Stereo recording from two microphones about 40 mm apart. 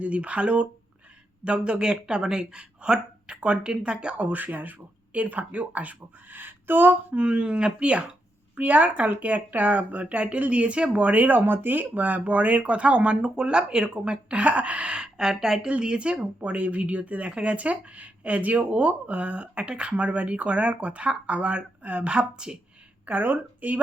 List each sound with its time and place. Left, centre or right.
0.0 s speech: right
4.2 s speech: right
6.3 s a sound: right
7.1 s speech: right
8.5 s speech: right
11.3 s speech: right; by 15.7 s centre
15.8 s speech: right
23.0 s a woman's voice: right